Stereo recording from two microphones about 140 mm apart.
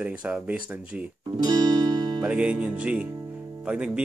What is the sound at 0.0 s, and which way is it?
Speech, 10° right (ahead or behind).